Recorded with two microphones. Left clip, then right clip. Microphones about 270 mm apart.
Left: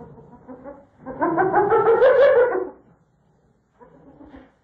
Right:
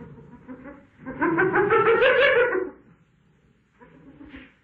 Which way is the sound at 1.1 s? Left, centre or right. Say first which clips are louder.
Left 3 dB; centre.